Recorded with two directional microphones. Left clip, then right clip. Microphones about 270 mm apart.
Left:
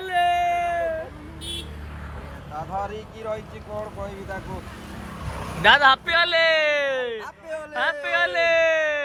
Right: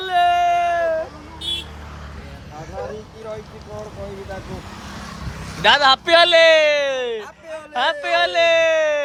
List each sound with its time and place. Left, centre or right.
0.0 s a sound: centre
1.5 s vehicle: right
5.6 s speech: centre